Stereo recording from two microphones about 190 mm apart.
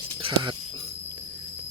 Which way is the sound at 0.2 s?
30° right (ahead or behind).